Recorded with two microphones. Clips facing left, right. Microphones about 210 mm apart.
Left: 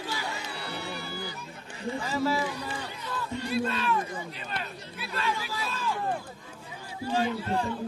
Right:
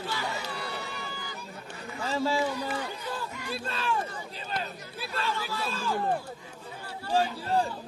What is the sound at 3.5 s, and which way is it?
Speech, 30° right (ahead or behind).